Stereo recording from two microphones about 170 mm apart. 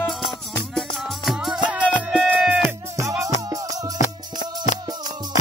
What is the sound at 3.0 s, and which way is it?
Music, 15° right (ahead or behind).